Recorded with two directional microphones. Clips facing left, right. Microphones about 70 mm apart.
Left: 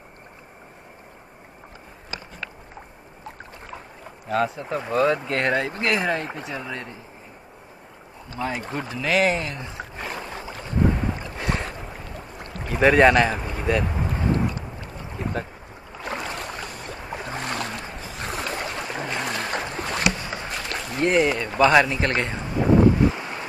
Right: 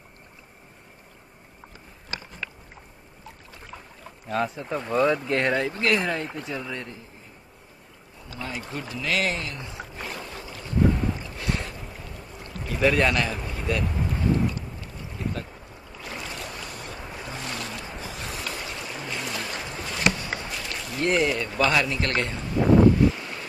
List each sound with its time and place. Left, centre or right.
4.3 s speech: centre
8.5 s boat: left
16.6 s boat: left
17.1 s boat: left
20.2 s run: left
21.0 s speech: left
21.9 s speech: left
22.9 s wind noise: left